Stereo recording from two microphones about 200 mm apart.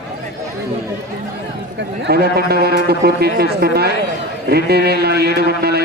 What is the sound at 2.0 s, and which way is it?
A man's voice, 50° right (ahead or behind).